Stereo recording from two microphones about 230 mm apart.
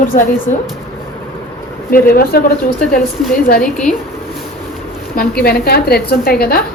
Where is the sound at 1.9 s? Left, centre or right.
Left.